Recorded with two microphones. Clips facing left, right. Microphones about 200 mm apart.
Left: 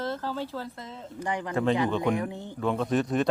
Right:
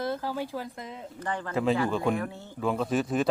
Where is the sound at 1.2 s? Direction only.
15° left (ahead or behind).